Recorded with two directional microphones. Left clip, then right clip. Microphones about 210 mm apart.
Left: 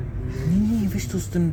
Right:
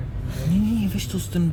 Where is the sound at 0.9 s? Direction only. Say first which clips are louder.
Left 1 dB; 20° right (ahead or behind).